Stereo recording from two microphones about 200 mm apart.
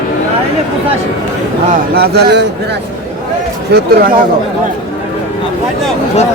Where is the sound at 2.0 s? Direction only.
55° right (ahead or behind).